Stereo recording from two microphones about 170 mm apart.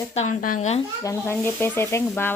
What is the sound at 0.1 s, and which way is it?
Speech, 45° left (ahead or behind).